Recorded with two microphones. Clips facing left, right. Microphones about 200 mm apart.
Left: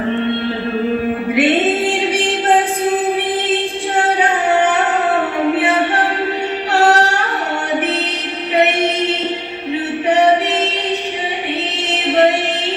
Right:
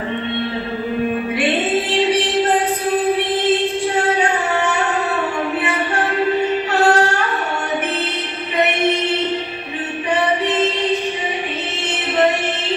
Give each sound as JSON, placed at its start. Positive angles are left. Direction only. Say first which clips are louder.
{"t": 6.7, "sound": "music", "louder": "left 3 dB", "side_deg": 70}
{"t": 11.9, "sound": "music", "louder": "left 4 dB", "side_deg": 70}